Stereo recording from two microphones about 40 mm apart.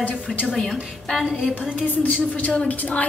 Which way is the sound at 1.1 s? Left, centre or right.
Centre.